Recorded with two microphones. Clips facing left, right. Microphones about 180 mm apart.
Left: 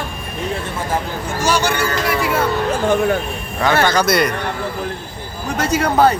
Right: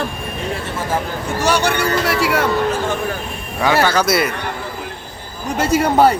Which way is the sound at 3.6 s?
10° right (ahead or behind).